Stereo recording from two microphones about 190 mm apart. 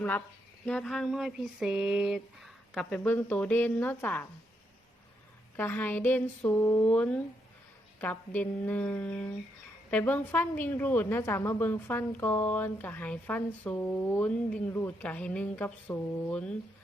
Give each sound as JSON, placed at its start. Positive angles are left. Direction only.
{"t": 0.6, "sound": "speech", "side_deg": 5}
{"t": 5.5, "sound": "a woman's voice", "side_deg": 10}